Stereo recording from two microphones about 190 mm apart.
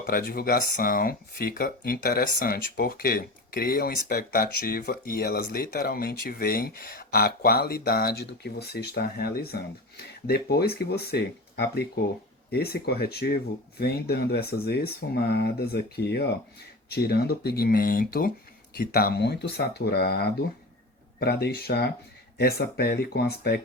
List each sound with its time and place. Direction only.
0.0 s speech: 50° left (ahead or behind)